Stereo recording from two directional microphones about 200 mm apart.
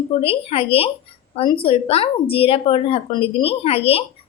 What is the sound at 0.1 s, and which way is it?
A woman's voice, 30° left (ahead or behind).